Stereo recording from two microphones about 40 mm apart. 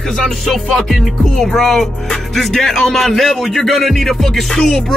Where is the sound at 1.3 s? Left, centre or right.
Centre.